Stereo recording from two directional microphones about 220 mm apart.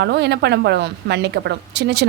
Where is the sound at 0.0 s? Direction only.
50° right (ahead or behind).